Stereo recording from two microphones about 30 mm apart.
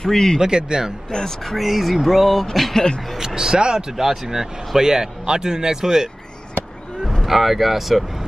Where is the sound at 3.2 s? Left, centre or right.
Right.